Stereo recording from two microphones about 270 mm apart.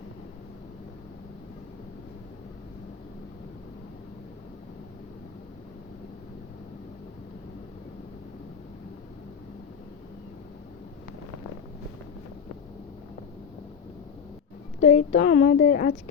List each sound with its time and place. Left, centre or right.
14.8 s speech: left